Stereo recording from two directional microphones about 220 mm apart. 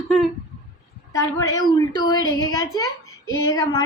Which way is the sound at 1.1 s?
15° left (ahead or behind).